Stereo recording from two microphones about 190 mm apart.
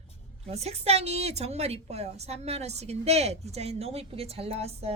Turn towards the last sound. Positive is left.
turn(degrees=-35)  # may be behind; listen again after turning